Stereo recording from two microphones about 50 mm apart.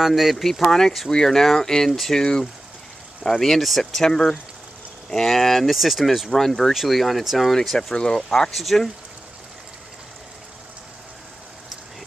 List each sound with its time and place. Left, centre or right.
0.0 s speech: centre
3.3 s speech: centre
7.9 s speech: centre